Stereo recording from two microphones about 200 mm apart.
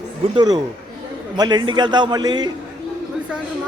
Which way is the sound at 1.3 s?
20° right (ahead or behind).